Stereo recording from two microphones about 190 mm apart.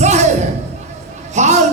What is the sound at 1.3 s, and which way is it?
Speech, 40° right (ahead or behind).